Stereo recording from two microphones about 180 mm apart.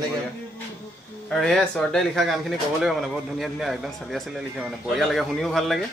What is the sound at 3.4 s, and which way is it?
A man's voice, centre (ahead or behind).